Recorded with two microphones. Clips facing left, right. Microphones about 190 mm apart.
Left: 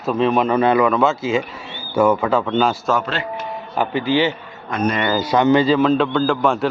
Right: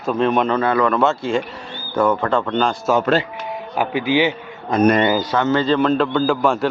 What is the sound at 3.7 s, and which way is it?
Speech, 10° right (ahead or behind).